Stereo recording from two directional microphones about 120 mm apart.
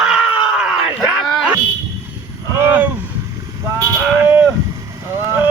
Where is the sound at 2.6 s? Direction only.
15° right (ahead or behind).